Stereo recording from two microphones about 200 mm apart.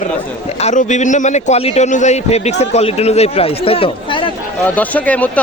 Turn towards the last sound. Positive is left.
turn(degrees=5)  # may be behind; listen again after turning